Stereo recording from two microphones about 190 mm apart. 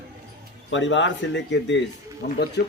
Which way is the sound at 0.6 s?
75° left (ahead or behind).